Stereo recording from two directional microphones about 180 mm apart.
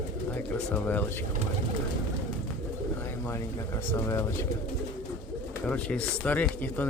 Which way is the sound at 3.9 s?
15° left (ahead or behind).